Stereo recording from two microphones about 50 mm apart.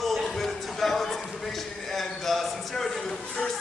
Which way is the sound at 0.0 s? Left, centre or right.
Centre.